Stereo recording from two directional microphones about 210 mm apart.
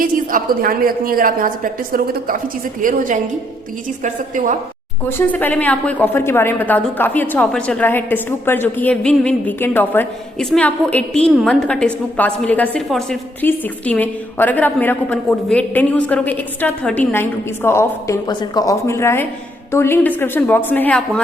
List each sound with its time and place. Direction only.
0.0 s a woman's voice: 40° right (ahead or behind)
5.0 s a woman's voice: 10° left (ahead or behind)